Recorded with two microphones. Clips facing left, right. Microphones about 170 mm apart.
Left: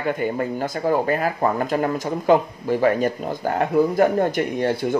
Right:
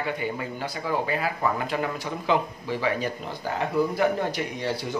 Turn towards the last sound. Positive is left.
turn(degrees=55)  # may be behind; listen again after turning